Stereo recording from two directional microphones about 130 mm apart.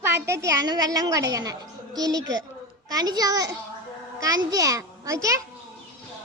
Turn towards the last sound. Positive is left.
turn(degrees=-25)  # may be behind; listen again after turning